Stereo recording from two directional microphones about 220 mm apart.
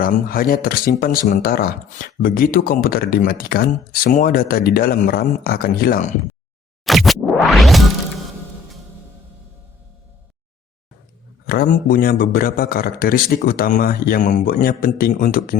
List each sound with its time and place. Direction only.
0.0 s a man's voice: 40° left (ahead or behind)
6.8 s scratch: centre (ahead or behind)
11.4 s a man's voice: 40° left (ahead or behind)